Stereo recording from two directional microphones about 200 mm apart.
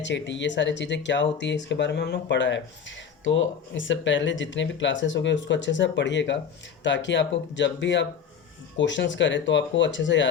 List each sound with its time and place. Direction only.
0.0 s speech: 65° left (ahead or behind)